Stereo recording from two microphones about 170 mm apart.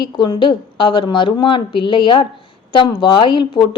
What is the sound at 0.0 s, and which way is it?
A woman's voice, 25° left (ahead or behind).